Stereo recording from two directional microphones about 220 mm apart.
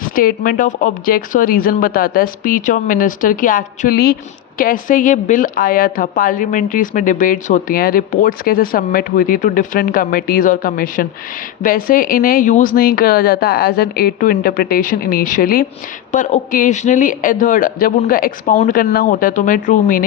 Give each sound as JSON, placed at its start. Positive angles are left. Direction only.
{"t": 0.0, "sound": "speech", "side_deg": 40}